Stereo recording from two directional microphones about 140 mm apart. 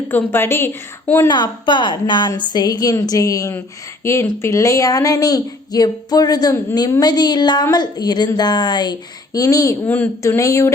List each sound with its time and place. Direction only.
0.1 s a woman's voice: 15° left (ahead or behind)
1.3 s speech: 35° left (ahead or behind)